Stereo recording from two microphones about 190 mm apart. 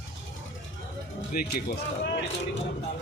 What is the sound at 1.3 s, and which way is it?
Speech, 50° left (ahead or behind).